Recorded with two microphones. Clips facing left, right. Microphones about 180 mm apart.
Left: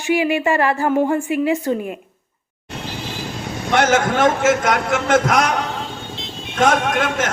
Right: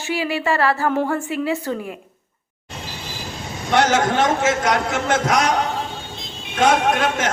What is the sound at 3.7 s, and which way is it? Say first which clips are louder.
A man's voice: left 1 dB; 55° left (ahead or behind).